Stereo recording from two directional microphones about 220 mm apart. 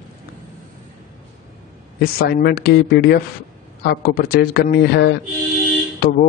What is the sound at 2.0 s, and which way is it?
Speech, 45° left (ahead or behind).